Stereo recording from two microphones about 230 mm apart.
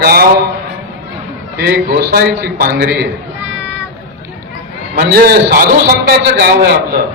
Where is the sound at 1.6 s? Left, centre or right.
Right.